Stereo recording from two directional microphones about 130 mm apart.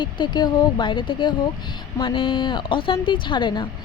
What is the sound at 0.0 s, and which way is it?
A woman's voice, 35° left (ahead or behind).